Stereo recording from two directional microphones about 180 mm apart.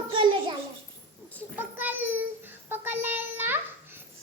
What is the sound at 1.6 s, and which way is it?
Child singing, 10° right (ahead or behind).